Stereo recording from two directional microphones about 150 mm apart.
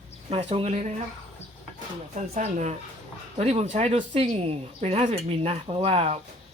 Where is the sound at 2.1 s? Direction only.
50° right (ahead or behind).